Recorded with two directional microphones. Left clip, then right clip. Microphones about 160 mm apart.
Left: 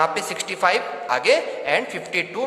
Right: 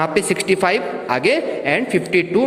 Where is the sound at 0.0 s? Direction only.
20° right (ahead or behind).